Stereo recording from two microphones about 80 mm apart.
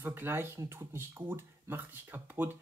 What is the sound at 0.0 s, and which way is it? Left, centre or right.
Speech, right.